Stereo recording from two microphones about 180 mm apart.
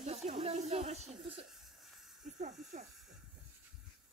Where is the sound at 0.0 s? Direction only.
35° right (ahead or behind).